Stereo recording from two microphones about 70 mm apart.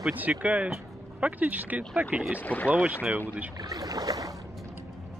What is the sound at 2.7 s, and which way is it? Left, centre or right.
Speech, right.